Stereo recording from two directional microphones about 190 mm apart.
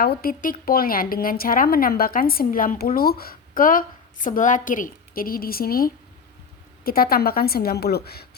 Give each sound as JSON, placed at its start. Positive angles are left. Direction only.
{"t": 0.0, "sound": "speech", "side_deg": 50}